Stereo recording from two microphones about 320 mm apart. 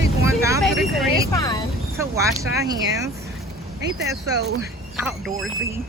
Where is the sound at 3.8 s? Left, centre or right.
Right.